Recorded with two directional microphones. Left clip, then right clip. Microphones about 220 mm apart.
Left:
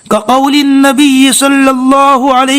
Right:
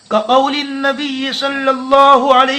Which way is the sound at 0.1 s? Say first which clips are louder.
Left 4 dB; 50° left (ahead or behind).